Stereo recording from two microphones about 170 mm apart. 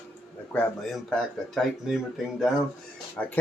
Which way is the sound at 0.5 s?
5° left (ahead or behind).